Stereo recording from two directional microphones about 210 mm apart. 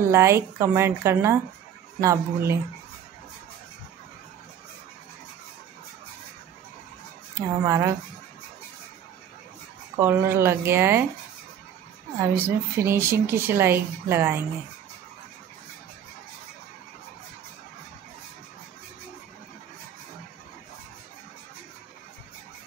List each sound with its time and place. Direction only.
0.1 s speech: 10° right (ahead or behind)
7.3 s speech: 15° right (ahead or behind)
9.9 s speech: 10° right (ahead or behind)
12.4 s speech: 10° right (ahead or behind)